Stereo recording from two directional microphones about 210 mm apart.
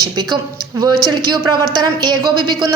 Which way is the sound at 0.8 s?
20° right (ahead or behind).